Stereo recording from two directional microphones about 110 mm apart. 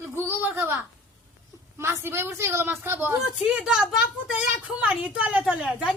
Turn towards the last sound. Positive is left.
turn(degrees=-10)  # may be behind; listen again after turning